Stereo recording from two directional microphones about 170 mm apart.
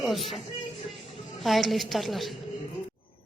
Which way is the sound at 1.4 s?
Centre (ahead or behind).